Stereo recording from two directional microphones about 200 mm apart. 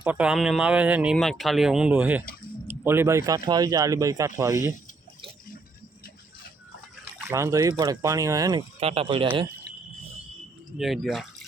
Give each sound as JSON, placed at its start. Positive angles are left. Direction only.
{"t": 0.0, "sound": "speech", "side_deg": -5}
{"t": 7.0, "sound": "speech", "side_deg": -15}
{"t": 8.8, "sound": "speech", "side_deg": -30}
{"t": 10.8, "sound": "speech", "side_deg": 0}